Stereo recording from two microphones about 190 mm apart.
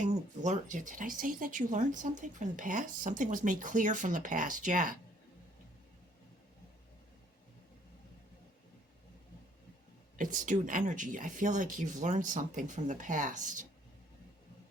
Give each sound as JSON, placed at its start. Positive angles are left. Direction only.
{"t": 0.0, "sound": "speech", "side_deg": -40}
{"t": 10.2, "sound": "speech", "side_deg": -45}